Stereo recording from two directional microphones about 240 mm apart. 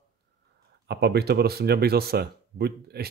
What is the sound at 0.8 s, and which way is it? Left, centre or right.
Speech, right.